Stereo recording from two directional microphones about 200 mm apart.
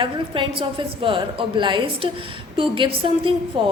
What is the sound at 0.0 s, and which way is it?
A woman's voice, 25° right (ahead or behind).